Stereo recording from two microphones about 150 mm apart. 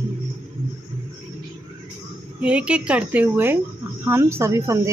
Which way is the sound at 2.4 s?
5° right (ahead or behind).